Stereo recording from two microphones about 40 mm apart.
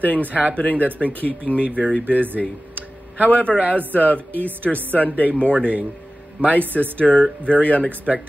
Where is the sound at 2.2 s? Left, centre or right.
Right.